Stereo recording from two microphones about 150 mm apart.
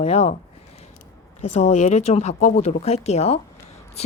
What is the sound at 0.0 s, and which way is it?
Speech, 45° left (ahead or behind).